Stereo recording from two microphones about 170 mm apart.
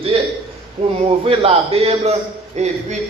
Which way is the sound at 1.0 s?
35° right (ahead or behind).